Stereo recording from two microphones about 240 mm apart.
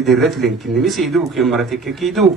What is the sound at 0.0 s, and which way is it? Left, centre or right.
A man's voice, centre.